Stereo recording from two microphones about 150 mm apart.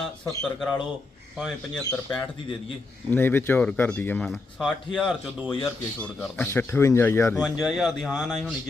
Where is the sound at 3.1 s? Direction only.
15° left (ahead or behind); by 5.5 s 5° right (ahead or behind).